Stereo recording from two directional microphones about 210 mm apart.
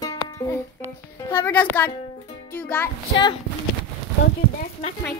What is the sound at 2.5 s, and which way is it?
Music, 5° left (ahead or behind).